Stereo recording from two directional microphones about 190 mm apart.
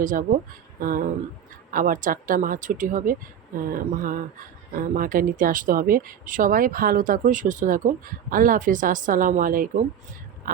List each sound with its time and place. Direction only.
0.0 s speech: 45° right (ahead or behind)